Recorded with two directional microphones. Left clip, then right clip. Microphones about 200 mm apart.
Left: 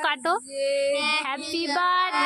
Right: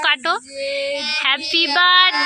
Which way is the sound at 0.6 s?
40° right (ahead or behind).